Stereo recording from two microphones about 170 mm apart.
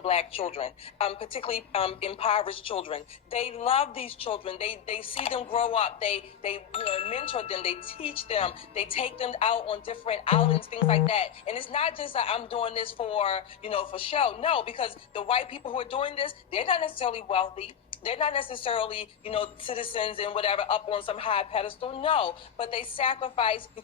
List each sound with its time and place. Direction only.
0.0 s a woman's voice: 35° left (ahead or behind)